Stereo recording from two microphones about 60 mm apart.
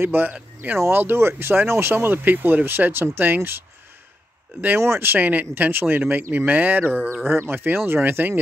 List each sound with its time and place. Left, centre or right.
0.0 s speech: right
4.7 s speech: right